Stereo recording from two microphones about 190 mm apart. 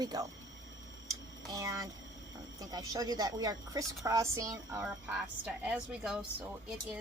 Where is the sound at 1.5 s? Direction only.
15° right (ahead or behind).